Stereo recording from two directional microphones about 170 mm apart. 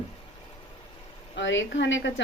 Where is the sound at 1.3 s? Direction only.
90° left.